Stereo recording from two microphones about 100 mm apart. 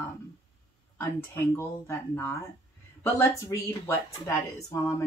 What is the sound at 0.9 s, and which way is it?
Speech, 20° left (ahead or behind).